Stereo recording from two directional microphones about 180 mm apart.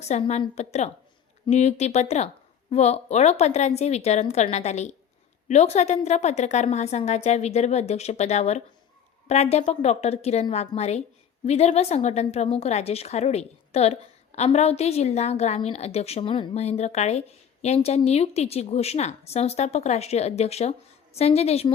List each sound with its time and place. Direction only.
0.0 s a woman's voice: 40° left (ahead or behind)